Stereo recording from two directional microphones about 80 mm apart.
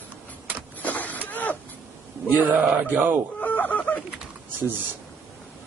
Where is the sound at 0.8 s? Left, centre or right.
Left.